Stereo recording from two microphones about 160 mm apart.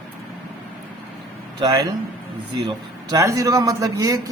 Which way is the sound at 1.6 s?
25° right (ahead or behind).